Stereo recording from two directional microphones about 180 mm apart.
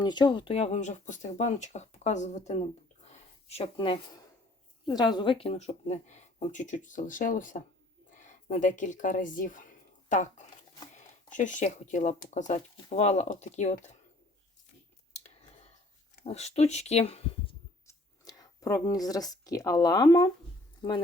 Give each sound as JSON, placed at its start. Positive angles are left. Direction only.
{"t": 0.0, "sound": "speech", "side_deg": 25}
{"t": 15.1, "sound": "whispering", "side_deg": 35}
{"t": 16.2, "sound": "speech", "side_deg": 35}
{"t": 17.8, "sound": "speech", "side_deg": 20}